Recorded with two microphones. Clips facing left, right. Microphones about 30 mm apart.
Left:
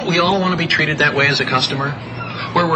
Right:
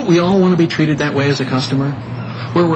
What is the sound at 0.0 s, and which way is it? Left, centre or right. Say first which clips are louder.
Speech: right 3 dB; left.